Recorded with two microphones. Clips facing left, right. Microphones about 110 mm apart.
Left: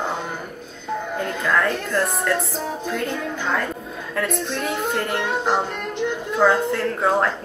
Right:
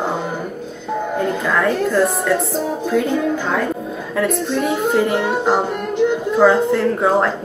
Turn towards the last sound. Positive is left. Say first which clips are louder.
# right 4 dB
turn(degrees=-5)  # may be behind; listen again after turning